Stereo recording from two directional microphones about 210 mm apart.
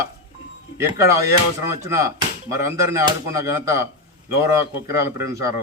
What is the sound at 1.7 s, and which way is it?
Speech, 15° right (ahead or behind).